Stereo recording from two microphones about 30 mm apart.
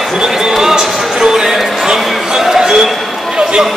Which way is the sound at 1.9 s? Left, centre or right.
Centre.